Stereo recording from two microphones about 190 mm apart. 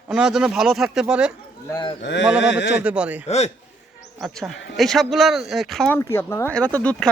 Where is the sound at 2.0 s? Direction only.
70° left (ahead or behind).